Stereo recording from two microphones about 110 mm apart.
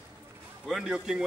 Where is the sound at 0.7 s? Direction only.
5° right (ahead or behind).